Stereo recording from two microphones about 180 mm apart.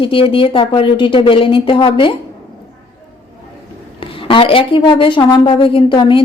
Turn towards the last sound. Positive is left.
turn(degrees=25)  # may be behind; listen again after turning